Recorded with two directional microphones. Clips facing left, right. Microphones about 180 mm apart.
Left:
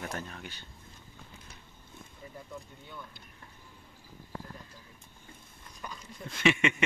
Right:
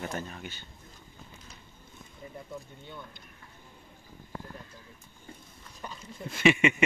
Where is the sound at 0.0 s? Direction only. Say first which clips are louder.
Right 3 dB; 5° right (ahead or behind).